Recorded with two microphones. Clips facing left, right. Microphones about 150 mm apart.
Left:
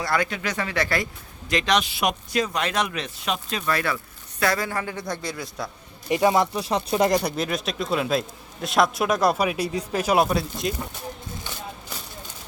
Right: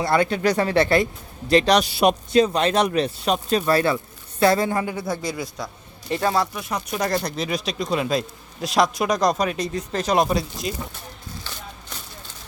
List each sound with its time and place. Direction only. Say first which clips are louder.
0.0 s speech: right 6 dB; 25° right (ahead or behind)
4.9 s speech: right 4 dB; 5° right (ahead or behind)
6.1 s speech: left 2 dB; 15° left (ahead or behind)
7.1 s speech: left 1 dB; 10° left (ahead or behind)